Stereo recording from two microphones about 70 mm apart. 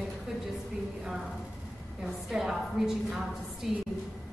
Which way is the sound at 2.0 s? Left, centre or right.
Centre.